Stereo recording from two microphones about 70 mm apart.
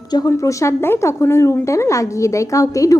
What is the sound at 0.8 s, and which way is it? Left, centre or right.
A woman's voice, left.